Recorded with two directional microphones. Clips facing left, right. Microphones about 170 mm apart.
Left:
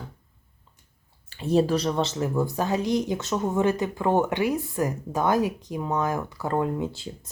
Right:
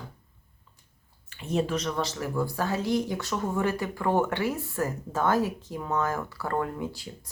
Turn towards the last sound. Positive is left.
turn(degrees=25)  # may be behind; listen again after turning